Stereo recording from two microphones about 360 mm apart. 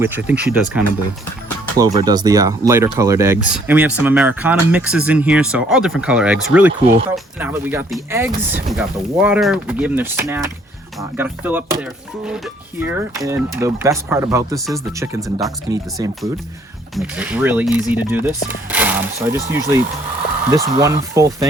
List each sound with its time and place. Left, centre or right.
0.0 s speech: centre